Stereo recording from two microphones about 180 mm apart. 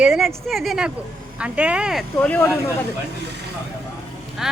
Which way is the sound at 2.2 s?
10° left (ahead or behind).